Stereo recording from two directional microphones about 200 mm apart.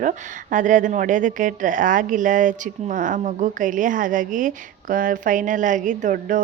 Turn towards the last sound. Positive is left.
turn(degrees=-40)  # may be behind; listen again after turning